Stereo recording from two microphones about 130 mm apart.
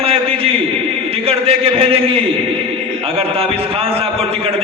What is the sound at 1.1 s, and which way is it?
A man's voice, 45° right (ahead or behind).